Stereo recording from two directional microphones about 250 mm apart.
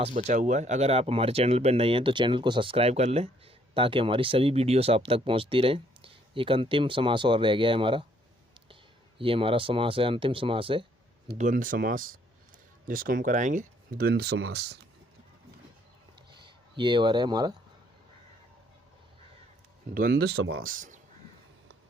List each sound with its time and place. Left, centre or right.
0.0 s speech: right
11.3 s speech: right
16.3 s speech: centre
19.9 s speech: right
20.6 s speech: right